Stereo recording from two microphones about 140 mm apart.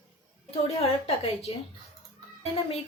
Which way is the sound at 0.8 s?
50° left (ahead or behind).